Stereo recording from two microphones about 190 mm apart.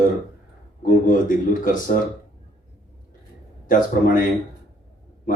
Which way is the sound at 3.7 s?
45° left (ahead or behind).